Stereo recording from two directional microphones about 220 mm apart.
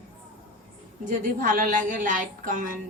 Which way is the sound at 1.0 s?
35° right (ahead or behind).